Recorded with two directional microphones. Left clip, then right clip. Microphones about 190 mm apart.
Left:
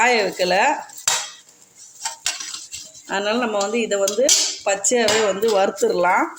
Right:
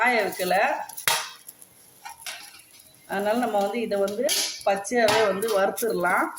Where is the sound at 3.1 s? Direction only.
45° left (ahead or behind).